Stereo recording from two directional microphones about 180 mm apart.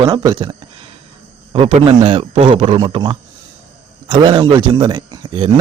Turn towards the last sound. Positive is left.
turn(degrees=-25)  # may be behind; listen again after turning